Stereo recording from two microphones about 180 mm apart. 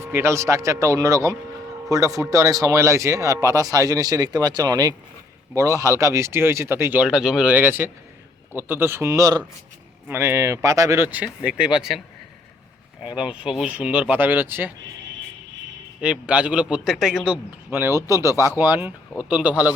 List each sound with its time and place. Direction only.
0.0 s speech: 15° right (ahead or behind)
13.1 s speech: 5° right (ahead or behind)
16.0 s speech: 5° right (ahead or behind)